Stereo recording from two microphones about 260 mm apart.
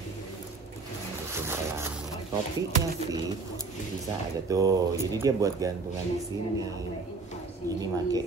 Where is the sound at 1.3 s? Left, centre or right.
Centre.